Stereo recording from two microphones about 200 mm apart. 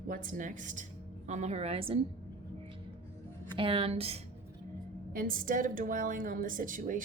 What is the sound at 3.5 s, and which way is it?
Speech, 25° right (ahead or behind).